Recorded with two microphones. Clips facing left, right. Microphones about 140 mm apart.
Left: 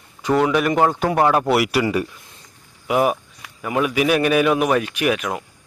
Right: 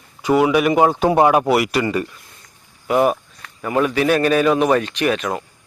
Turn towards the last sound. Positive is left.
turn(degrees=10)  # may be behind; listen again after turning